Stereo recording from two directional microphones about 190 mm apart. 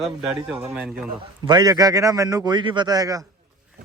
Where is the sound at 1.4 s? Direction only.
20° right (ahead or behind).